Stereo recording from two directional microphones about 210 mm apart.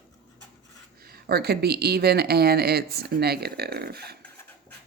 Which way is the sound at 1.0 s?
45° right (ahead or behind).